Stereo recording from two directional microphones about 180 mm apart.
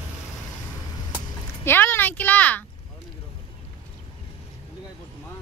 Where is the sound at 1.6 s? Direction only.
10° left (ahead or behind).